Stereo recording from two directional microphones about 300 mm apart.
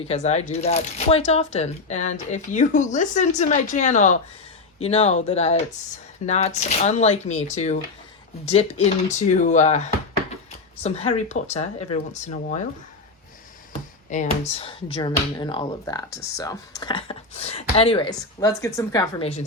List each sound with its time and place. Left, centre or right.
0.0 s speech: left
14.1 s speech: left